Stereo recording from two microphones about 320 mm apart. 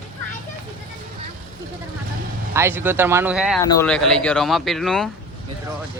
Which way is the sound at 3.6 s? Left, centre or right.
Centre.